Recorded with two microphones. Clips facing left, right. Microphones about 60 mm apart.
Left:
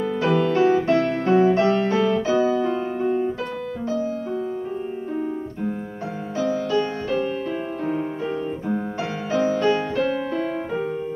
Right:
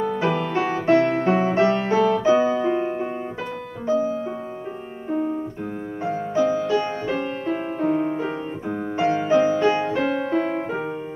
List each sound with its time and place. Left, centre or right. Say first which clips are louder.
0.3 s music: left 4 dB; centre
0.6 s music: right 2 dB; right
2.6 s music: right 1 dB; right
6.3 s music: right 1 dB; right